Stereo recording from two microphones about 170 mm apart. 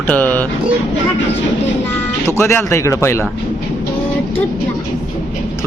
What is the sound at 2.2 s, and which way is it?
Speech, 15° left (ahead or behind).